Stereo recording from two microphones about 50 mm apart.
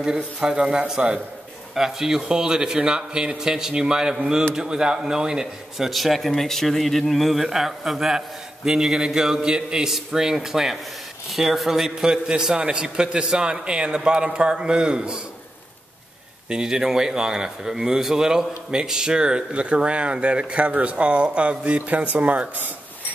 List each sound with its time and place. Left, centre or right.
0.0 s a man's voice: centre
1.8 s a man's voice: centre
5.9 s a man's voice: centre
16.4 s a man's voice: centre; by 22.7 s right